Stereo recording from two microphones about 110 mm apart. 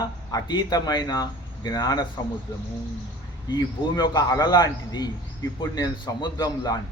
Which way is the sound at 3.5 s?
40° left (ahead or behind).